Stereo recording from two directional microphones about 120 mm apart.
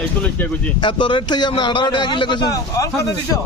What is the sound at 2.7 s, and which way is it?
Speech, 30° left (ahead or behind).